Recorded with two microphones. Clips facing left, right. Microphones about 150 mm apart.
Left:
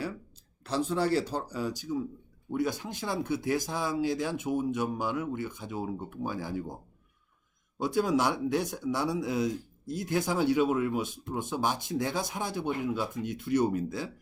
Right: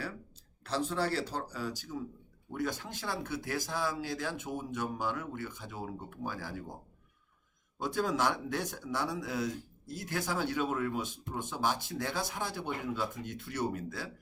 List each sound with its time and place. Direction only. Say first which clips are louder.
0.6 s speech: left 4 dB; 15° left (ahead or behind)
7.8 s speech: left 5 dB; 10° left (ahead or behind)